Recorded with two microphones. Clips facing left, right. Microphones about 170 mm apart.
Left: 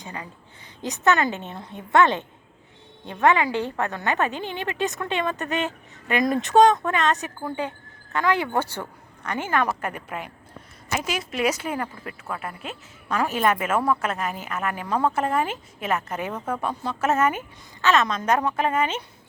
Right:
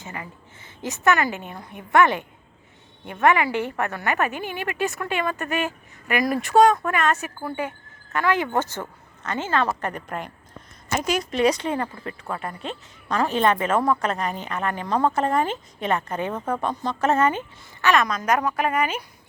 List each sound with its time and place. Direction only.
0.0 s a woman's voice: 20° left (ahead or behind)
17.8 s a woman's voice: 25° left (ahead or behind)